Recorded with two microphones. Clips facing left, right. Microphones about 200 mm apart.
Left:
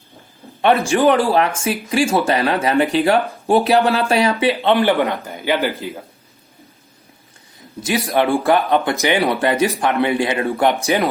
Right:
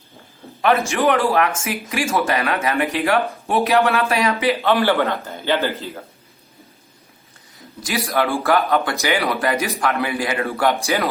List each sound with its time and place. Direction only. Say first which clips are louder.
0.6 s speech: left 3 dB; 30° left (ahead or behind); by 6.0 s 15° left (ahead or behind)
7.8 s speech: left 3 dB; 25° left (ahead or behind)